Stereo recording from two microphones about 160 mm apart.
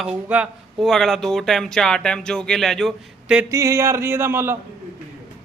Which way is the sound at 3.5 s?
20° right (ahead or behind).